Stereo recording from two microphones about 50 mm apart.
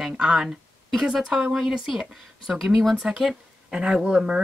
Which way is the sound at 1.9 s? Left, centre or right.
Centre.